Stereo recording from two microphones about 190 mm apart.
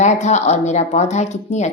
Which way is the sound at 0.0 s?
40° left (ahead or behind).